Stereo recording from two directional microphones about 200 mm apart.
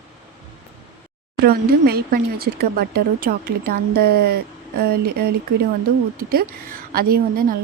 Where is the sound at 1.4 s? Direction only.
50° right (ahead or behind).